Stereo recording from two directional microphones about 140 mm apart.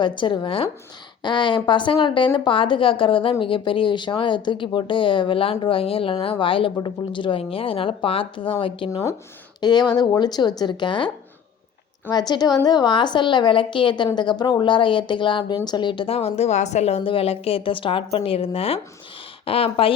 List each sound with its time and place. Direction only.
0.0 s speech: 35° left (ahead or behind)
8.9 s speech: 25° left (ahead or behind)
12.1 s speech: 30° left (ahead or behind)